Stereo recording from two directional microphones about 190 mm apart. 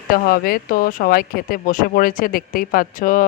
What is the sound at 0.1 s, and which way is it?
Speech, 50° left (ahead or behind).